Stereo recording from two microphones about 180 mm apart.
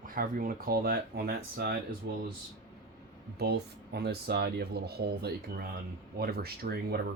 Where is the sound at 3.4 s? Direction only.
65° right (ahead or behind).